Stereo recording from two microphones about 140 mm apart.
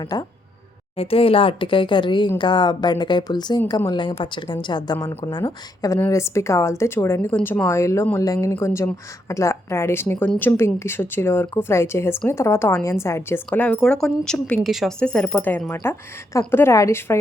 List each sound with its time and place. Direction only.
0.1 s speech: 30° left (ahead or behind)
0.9 s speech: 45° left (ahead or behind); by 17.2 s 20° left (ahead or behind)